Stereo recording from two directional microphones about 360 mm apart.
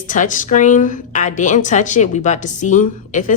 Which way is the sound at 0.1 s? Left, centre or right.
Left.